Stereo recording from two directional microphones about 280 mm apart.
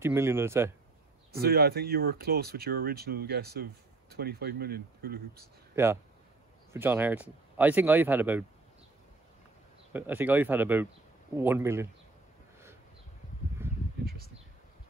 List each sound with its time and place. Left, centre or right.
0.0 s speech: centre
1.4 s speech: right
5.7 s speech: centre
9.9 s speech: centre
14.0 s a sound: right